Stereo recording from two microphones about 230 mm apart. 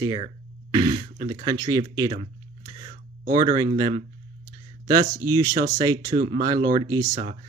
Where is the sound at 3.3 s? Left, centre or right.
Centre.